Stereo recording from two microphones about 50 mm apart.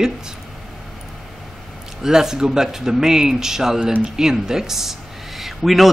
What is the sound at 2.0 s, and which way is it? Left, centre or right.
Speech, centre.